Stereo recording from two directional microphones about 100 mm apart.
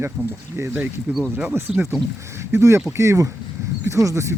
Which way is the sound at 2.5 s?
30° right (ahead or behind).